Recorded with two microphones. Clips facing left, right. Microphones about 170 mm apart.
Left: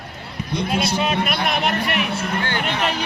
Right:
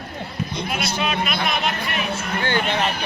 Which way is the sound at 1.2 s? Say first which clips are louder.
Left 2 dB; 65° left (ahead or behind).